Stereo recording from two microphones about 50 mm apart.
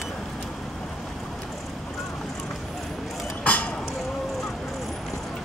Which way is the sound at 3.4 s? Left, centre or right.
Left.